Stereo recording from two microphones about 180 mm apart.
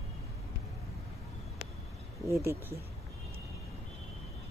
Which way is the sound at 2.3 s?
15° right (ahead or behind).